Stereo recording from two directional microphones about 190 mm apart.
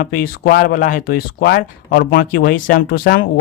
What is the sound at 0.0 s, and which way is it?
Speech, 50° left (ahead or behind).